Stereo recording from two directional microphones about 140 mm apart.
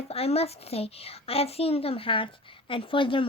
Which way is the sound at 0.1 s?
45° left (ahead or behind).